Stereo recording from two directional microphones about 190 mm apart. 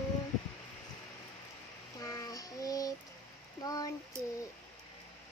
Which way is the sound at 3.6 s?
20° left (ahead or behind).